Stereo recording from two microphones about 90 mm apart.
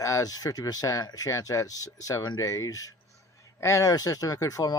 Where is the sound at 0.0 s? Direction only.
40° left (ahead or behind).